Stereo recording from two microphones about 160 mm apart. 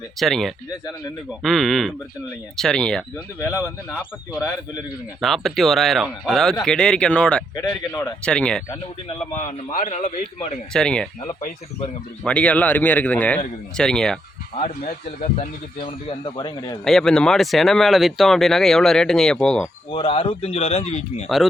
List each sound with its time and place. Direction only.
0.2 s speech: centre (ahead or behind)
5.2 s speech: centre (ahead or behind)
7.5 s speech: 25° left (ahead or behind)
8.2 s speech: 5° left (ahead or behind)
9.4 s a man's voice: 50° left (ahead or behind)
10.7 s speech: 5° left (ahead or behind)
12.2 s a man's voice: 10° left (ahead or behind)
14.6 s a man's voice: 45° left (ahead or behind)
15.8 s speech: 35° left (ahead or behind)
16.8 s speech: 5° left (ahead or behind)
19.9 s speech: 35° left (ahead or behind)